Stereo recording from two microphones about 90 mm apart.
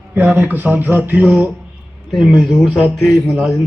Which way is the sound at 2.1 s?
5° right (ahead or behind).